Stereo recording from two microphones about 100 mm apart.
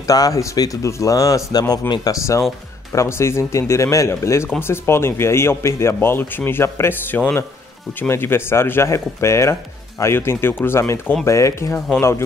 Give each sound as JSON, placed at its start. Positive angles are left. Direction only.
{"t": 0.0, "sound": "speech", "side_deg": 35}